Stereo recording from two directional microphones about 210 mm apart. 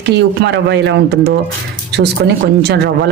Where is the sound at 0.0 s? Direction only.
55° right (ahead or behind).